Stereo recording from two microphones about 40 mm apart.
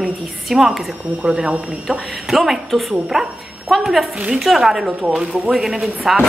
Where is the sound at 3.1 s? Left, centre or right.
Centre.